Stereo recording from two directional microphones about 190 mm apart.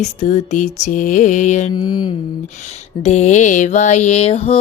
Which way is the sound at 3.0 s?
35° left (ahead or behind).